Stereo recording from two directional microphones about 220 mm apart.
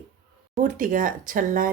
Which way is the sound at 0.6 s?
40° right (ahead or behind).